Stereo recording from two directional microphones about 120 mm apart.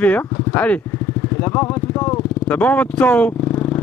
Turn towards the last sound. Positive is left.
turn(degrees=10)  # may be behind; listen again after turning